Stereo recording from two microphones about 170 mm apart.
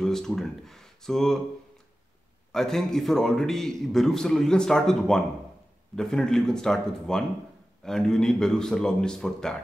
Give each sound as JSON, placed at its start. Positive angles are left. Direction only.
{"t": 0.0, "sound": "speech", "side_deg": 0}
{"t": 2.5, "sound": "a man's voice", "side_deg": 5}